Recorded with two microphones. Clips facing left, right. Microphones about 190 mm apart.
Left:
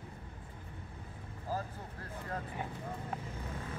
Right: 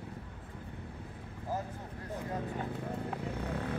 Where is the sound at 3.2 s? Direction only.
70° right (ahead or behind).